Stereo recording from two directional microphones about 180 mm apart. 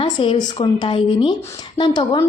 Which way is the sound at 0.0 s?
30° left (ahead or behind).